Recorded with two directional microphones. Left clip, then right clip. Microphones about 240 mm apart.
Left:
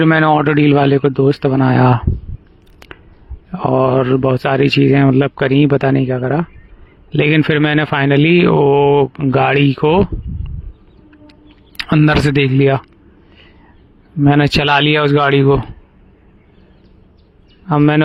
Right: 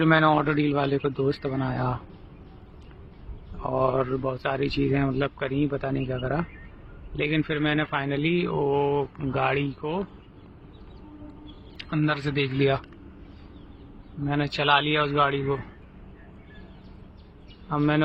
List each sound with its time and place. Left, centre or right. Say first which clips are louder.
0.0 s speech: left 9 dB; left
3.6 s speech: left 11 dB; left
11.8 s speech: left 14 dB; left
14.3 s a man's voice: left 11 dB; left
17.7 s speech: left 12 dB; left